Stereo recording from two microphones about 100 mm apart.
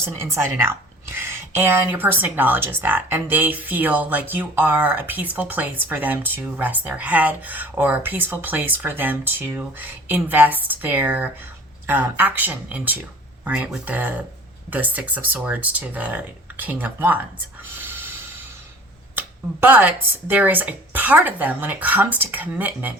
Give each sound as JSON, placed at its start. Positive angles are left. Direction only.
{"t": 0.0, "sound": "speech", "side_deg": -25}
{"t": 17.6, "sound": "a sound", "side_deg": -20}
{"t": 19.1, "sound": "speech", "side_deg": -20}